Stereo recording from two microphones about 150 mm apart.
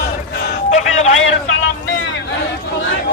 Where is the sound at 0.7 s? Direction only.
50° left (ahead or behind).